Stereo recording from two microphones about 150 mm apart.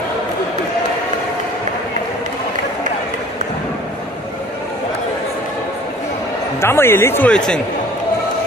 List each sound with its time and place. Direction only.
6.6 s speech: 15° left (ahead or behind)